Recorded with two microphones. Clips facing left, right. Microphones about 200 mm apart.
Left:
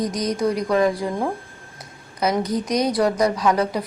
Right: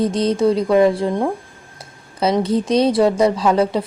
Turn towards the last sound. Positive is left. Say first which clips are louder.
# right 4 dB
turn(degrees=-25)  # may be behind; listen again after turning